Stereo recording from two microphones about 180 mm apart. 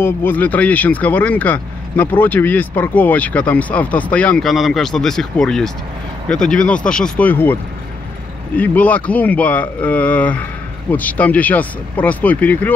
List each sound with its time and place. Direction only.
0.0 s speech: 10° left (ahead or behind)
8.5 s speech: 10° left (ahead or behind)